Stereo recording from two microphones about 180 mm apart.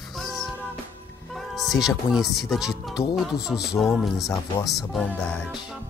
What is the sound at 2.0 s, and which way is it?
Speech, centre (ahead or behind).